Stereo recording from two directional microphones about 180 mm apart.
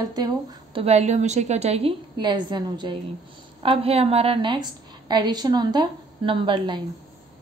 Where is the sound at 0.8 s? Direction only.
40° right (ahead or behind).